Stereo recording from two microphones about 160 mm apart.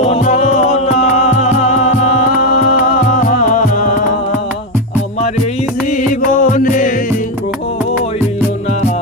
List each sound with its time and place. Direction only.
0.0 s music: 45° left (ahead or behind)
6.0 s music: 55° left (ahead or behind)